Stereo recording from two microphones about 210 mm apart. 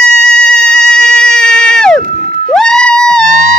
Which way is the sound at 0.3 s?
5° left (ahead or behind).